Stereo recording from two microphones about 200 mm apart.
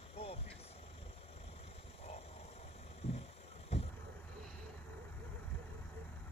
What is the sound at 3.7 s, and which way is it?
Vehicle, 30° left (ahead or behind).